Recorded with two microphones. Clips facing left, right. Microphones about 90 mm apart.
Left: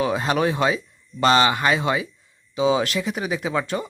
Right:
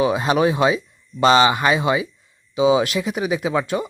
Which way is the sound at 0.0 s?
15° right (ahead or behind).